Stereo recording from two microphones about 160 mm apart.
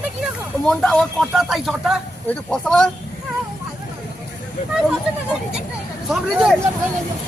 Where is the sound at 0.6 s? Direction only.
5° left (ahead or behind).